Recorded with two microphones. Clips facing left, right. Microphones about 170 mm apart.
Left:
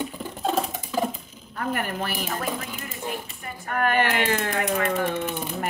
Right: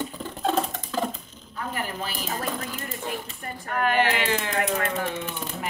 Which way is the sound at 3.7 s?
50° left (ahead or behind).